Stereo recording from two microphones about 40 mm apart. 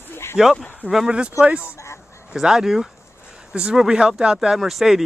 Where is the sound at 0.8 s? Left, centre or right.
Centre.